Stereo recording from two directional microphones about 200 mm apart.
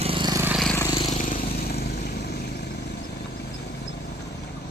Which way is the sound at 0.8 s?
20° left (ahead or behind).